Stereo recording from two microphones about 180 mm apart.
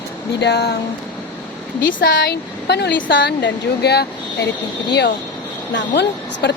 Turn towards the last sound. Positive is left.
turn(degrees=70)  # may be behind; listen again after turning